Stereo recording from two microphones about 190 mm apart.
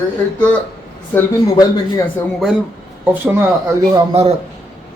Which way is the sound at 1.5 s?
20° left (ahead or behind).